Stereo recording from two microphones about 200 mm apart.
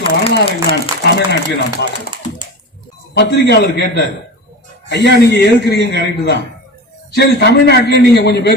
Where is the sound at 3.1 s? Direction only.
55° left (ahead or behind).